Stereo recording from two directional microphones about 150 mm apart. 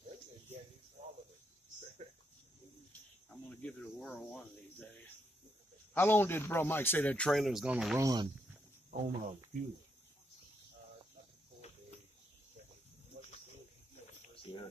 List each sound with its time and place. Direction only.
3.4 s speech: 10° left (ahead or behind)
5.9 s speech: 15° left (ahead or behind); by 8.0 s 5° right (ahead or behind)
8.0 s speech: 25° right (ahead or behind)
8.9 s speech: 55° right (ahead or behind)
14.3 s a sound: 35° left (ahead or behind)